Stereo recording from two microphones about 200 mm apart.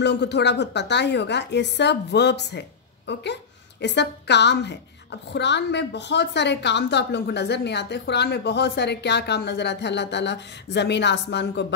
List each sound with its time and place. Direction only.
0.0 s a woman's voice: 60° left (ahead or behind)